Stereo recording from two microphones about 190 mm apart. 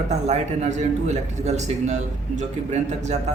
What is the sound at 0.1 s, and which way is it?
A man's voice, 35° right (ahead or behind).